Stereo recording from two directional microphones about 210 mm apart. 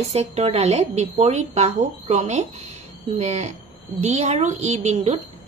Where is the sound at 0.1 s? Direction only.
30° right (ahead or behind).